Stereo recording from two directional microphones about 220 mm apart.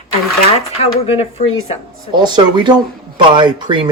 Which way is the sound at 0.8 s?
25° left (ahead or behind).